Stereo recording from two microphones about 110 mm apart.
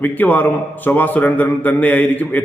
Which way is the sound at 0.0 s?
15° left (ahead or behind).